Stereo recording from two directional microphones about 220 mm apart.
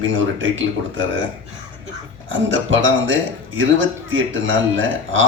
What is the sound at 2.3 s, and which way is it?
A man's voice, 60° right (ahead or behind).